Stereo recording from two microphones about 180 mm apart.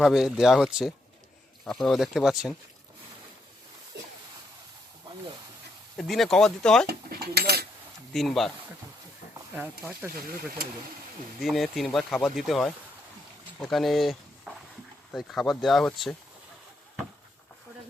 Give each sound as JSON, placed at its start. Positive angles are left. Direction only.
{"t": 0.0, "sound": "speech", "side_deg": 0}
{"t": 6.0, "sound": "speech", "side_deg": 0}
{"t": 6.8, "sound": "cutlery", "side_deg": -60}
{"t": 8.1, "sound": "speech", "side_deg": 0}
{"t": 9.6, "sound": "speech", "side_deg": -10}
{"t": 11.3, "sound": "speech", "side_deg": 0}